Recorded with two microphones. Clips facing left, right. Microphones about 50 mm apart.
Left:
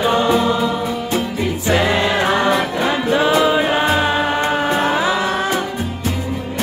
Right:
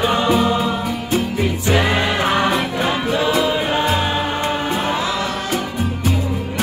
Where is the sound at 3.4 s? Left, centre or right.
Left.